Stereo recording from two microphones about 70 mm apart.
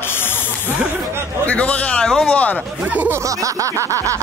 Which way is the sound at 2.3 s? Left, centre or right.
Left.